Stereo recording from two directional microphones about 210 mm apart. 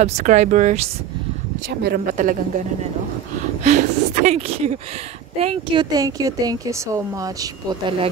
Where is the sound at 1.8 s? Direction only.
45° right (ahead or behind).